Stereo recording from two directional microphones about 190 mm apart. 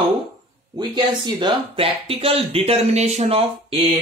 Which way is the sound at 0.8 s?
25° right (ahead or behind).